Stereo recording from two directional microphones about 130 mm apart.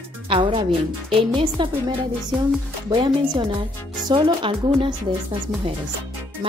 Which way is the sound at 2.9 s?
40° right (ahead or behind).